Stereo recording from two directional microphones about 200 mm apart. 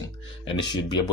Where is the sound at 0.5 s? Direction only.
20° left (ahead or behind).